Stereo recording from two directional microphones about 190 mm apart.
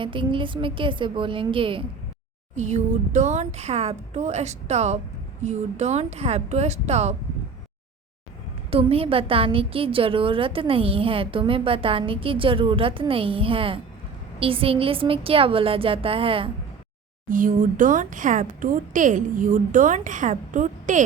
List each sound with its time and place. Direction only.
0.0 s a woman's voice: 25° right (ahead or behind)
2.6 s speech: 40° right (ahead or behind)
8.7 s a woman's voice: 30° right (ahead or behind)
17.2 s speech: 45° right (ahead or behind)